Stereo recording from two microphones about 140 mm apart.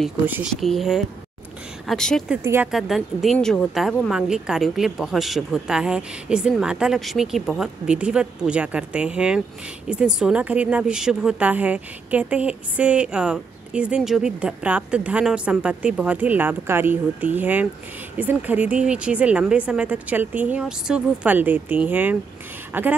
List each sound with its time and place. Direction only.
0.6 s a woman's voice: centre (ahead or behind)
2.4 s a woman's voice: 15° right (ahead or behind)
2.7 s a woman's voice: centre (ahead or behind)
3.3 s speech: 10° left (ahead or behind)
3.7 s a woman's voice: centre (ahead or behind)